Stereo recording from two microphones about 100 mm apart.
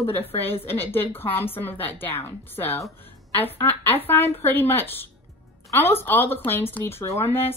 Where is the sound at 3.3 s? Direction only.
20° left (ahead or behind).